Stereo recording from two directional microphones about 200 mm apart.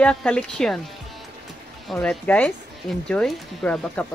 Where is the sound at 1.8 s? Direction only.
Centre (ahead or behind).